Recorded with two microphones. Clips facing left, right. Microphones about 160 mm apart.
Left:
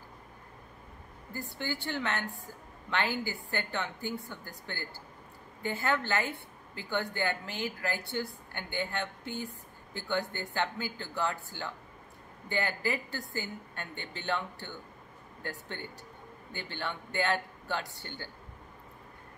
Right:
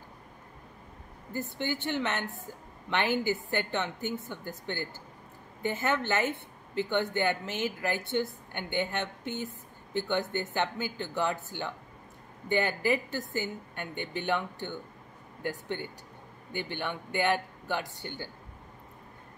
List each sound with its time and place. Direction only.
1.3 s a woman's voice: 20° right (ahead or behind)